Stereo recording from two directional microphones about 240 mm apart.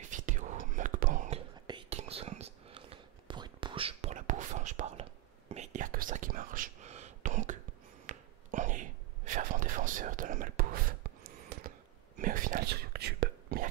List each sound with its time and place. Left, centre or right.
0.0 s whispering: right
1.7 s whispering: right
8.1 s a sound: right
12.2 s whispering: right